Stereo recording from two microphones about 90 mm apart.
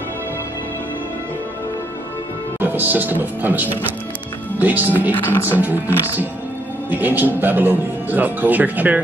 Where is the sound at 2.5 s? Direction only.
20° right (ahead or behind).